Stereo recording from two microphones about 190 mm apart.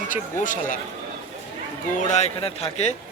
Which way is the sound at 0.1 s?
45° left (ahead or behind).